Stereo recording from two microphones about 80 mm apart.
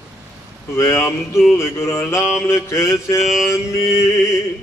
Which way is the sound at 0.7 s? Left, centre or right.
Left.